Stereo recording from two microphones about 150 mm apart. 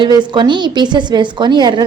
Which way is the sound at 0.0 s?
30° right (ahead or behind).